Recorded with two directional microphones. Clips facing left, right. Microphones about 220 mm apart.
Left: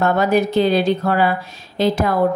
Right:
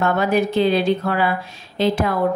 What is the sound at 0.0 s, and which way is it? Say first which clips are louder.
A woman's voice: left 2 dB; 40° left (ahead or behind).